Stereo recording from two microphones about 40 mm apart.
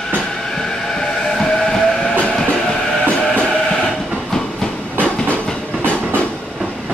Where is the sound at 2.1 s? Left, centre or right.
Left.